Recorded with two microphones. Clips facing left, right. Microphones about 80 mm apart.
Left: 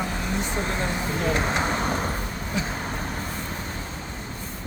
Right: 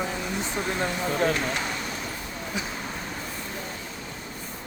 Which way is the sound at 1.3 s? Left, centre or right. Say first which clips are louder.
Left 3 dB; left.